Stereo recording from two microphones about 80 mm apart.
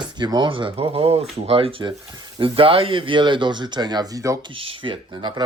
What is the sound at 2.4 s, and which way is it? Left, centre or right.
Speech, right.